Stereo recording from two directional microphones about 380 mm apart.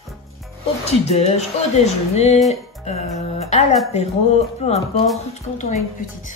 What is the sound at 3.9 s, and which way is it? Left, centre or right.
Speech, centre.